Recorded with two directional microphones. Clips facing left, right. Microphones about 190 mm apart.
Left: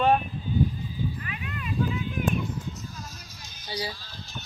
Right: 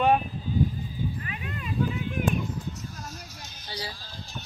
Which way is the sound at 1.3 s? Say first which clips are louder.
Even; 30° right (ahead or behind).